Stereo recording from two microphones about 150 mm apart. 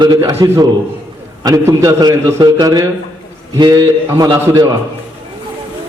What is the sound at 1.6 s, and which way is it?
A man's voice, 25° right (ahead or behind).